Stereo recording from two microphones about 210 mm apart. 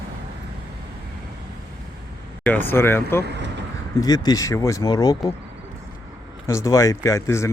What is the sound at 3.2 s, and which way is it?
Vehicle, 55° right (ahead or behind).